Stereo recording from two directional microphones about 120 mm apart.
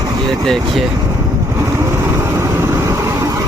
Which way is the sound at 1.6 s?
25° right (ahead or behind).